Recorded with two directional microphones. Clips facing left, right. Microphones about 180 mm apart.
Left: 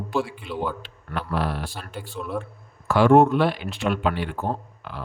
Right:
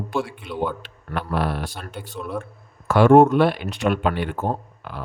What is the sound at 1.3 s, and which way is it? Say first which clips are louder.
Speech: right 2 dB; 60° right (ahead or behind).